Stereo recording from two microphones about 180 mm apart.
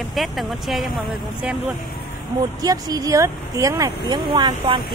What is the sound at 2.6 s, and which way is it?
Speech, 20° right (ahead or behind).